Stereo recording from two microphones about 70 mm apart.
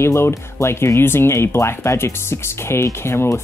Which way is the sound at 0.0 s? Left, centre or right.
Left.